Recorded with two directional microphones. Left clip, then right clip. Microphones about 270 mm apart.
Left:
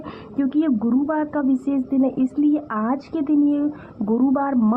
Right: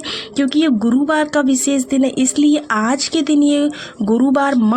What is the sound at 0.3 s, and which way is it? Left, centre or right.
Speech, centre.